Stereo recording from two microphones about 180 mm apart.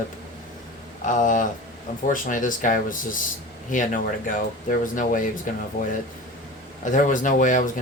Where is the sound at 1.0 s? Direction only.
45° left (ahead or behind).